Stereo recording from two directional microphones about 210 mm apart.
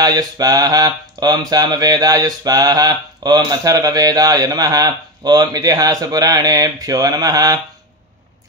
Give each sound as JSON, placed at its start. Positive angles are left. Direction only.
{"t": 0.0, "sound": "mantra", "side_deg": -15}